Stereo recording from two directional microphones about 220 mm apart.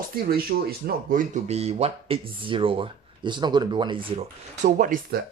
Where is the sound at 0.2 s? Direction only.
45° right (ahead or behind).